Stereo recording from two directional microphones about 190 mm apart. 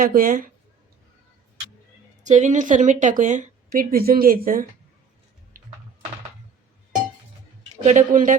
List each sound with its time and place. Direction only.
0.0 s a woman's voice: 50° right (ahead or behind)
2.2 s a woman's voice: 40° right (ahead or behind)
7.9 s a woman's voice: 40° right (ahead or behind)